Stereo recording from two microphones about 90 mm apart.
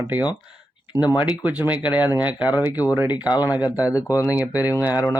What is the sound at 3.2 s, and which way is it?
Speech, 45° left (ahead or behind).